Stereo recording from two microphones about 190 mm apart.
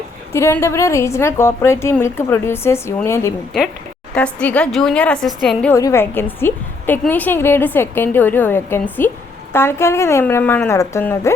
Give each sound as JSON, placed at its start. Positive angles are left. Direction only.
{"t": 0.3, "sound": "a woman's voice", "side_deg": 15}
{"t": 5.7, "sound": "a woman's voice", "side_deg": 15}